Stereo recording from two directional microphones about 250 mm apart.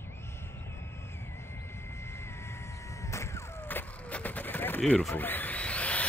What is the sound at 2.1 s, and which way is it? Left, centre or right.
Vehicle, centre.